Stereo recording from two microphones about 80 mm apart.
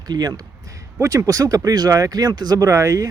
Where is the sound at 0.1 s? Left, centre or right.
Right.